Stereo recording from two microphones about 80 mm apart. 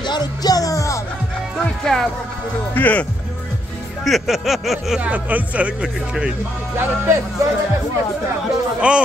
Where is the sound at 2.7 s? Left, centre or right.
Centre.